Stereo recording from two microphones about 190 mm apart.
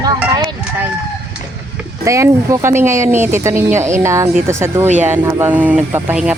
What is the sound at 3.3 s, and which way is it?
Speech, 15° right (ahead or behind).